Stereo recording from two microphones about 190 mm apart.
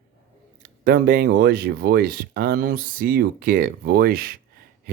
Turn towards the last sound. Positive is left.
turn(degrees=-55)  # may be behind; listen again after turning